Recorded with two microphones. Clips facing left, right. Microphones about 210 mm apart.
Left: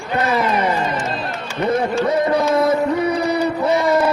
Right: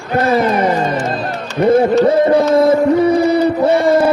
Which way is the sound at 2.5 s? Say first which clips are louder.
Right 6 dB; 30° right (ahead or behind).